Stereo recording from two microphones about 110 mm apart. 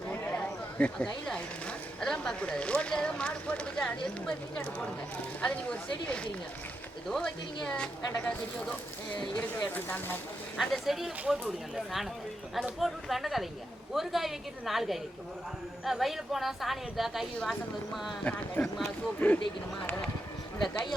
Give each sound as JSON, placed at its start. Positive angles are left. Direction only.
{"t": 0.8, "sound": "speech", "side_deg": 10}
{"t": 9.6, "sound": "speech", "side_deg": 20}
{"t": 10.6, "sound": "a woman's voice", "side_deg": 0}
{"t": 18.2, "sound": "speech", "side_deg": 10}